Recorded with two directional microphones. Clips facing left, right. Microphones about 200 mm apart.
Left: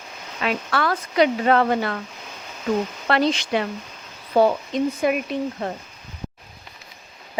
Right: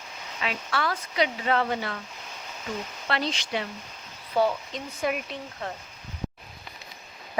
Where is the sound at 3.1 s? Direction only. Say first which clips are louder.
Left 8 dB; 55° left (ahead or behind).